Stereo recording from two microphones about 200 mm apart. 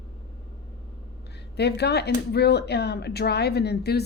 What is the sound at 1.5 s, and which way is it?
Speech, 55° left (ahead or behind).